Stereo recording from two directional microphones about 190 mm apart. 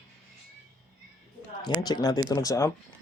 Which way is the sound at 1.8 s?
20° left (ahead or behind).